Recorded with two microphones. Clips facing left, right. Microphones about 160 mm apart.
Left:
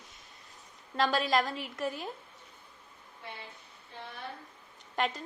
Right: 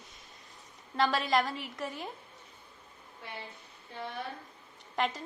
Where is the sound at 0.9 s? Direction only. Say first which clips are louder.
Even; centre (ahead or behind).